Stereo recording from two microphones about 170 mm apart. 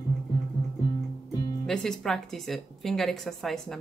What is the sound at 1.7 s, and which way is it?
A woman's voice, 5° left (ahead or behind).